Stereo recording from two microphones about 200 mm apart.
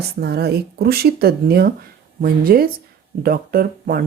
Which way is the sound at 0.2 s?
55° right (ahead or behind).